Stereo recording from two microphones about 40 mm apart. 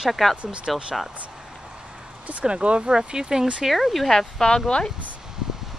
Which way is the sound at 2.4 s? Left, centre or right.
Right.